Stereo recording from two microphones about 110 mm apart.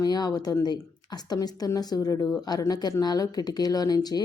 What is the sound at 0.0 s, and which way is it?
Speech, 35° left (ahead or behind).